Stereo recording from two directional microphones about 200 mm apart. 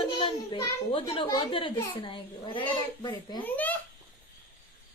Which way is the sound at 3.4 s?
10° left (ahead or behind).